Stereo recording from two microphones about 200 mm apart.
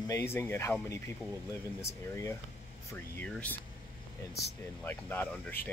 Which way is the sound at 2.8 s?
10° left (ahead or behind).